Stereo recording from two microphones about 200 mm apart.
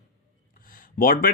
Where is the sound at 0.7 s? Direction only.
45° left (ahead or behind).